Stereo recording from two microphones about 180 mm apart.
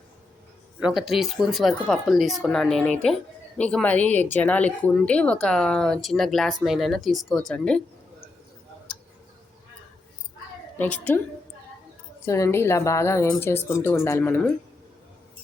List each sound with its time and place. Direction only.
0.8 s speech: centre (ahead or behind)
10.8 s speech: 10° left (ahead or behind)
12.2 s speech: 15° left (ahead or behind)